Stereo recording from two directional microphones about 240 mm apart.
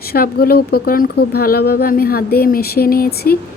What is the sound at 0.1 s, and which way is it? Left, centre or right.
Speech, left.